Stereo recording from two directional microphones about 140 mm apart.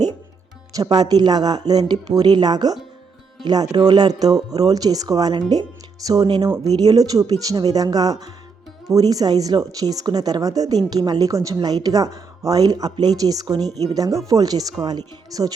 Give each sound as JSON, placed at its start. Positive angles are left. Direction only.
{"t": 0.8, "sound": "speech", "side_deg": -30}